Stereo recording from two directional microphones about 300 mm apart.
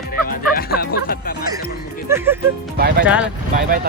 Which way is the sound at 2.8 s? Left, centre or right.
Right.